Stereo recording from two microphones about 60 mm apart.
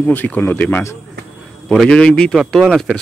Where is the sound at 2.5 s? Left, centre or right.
Centre.